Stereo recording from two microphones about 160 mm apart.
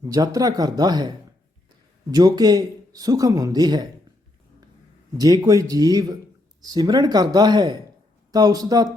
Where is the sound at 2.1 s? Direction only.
25° right (ahead or behind).